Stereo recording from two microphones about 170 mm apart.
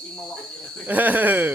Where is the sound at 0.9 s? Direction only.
10° right (ahead or behind).